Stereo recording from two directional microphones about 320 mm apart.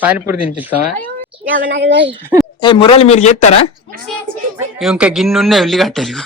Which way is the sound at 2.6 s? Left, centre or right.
Centre.